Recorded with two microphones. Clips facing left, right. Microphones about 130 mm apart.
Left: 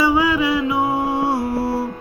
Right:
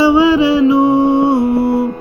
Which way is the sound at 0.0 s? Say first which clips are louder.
Right 7 dB; 25° right (ahead or behind).